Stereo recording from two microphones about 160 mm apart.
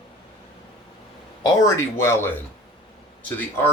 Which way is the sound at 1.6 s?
15° left (ahead or behind).